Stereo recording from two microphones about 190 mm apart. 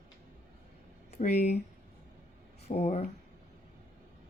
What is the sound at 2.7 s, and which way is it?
Speech, 35° left (ahead or behind).